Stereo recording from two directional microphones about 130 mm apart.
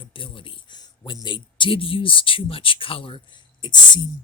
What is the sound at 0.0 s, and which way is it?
Speech, 40° left (ahead or behind).